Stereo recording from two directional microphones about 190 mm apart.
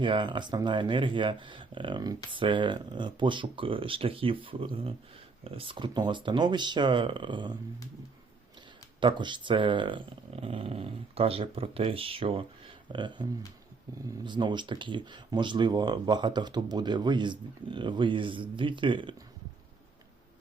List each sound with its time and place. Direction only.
0.0 s speech: 25° right (ahead or behind)
9.0 s speech: 25° right (ahead or behind)
14.3 s speech: 25° right (ahead or behind)